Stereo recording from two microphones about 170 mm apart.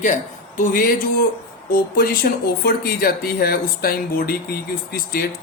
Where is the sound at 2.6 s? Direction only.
65° left (ahead or behind).